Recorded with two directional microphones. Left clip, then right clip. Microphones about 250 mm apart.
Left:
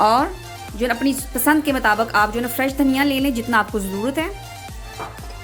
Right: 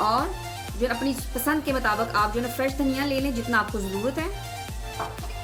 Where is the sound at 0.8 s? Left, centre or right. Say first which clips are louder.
Left 6 dB; left.